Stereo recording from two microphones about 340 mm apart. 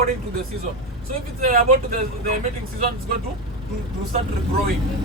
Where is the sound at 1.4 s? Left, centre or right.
Right.